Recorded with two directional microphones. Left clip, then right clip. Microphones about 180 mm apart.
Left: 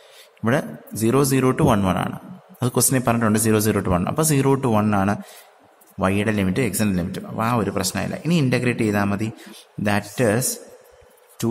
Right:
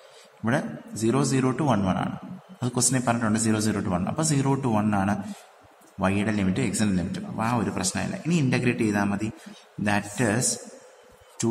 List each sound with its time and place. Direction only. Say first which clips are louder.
0.4 s a man's voice: left 5 dB; 40° left (ahead or behind)